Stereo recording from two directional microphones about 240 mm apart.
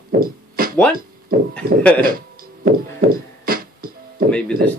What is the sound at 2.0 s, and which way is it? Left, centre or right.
Music, right.